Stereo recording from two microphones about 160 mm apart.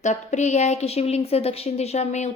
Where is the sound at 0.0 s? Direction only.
45° left (ahead or behind).